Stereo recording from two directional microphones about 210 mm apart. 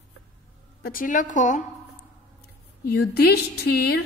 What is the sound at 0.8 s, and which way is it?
Speech, 40° left (ahead or behind).